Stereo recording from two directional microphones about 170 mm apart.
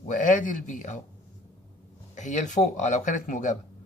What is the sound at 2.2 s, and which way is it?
Speech, 45° left (ahead or behind).